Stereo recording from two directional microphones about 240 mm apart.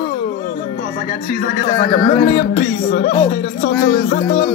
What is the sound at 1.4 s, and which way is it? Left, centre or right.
Music, left.